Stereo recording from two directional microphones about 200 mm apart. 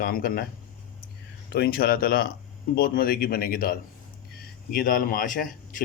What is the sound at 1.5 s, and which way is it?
Speech, 50° left (ahead or behind).